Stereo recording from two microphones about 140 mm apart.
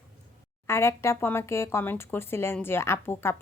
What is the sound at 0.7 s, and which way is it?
Speech, 20° left (ahead or behind).